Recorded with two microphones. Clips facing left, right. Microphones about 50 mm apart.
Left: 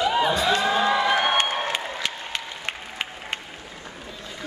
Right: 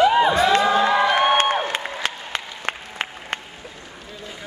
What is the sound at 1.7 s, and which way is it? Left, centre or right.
Applause, right.